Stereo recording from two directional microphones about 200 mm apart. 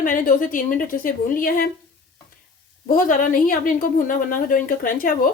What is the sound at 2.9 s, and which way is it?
A woman's voice, 40° left (ahead or behind).